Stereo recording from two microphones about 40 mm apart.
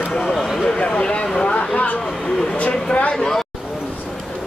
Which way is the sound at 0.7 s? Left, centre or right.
Left.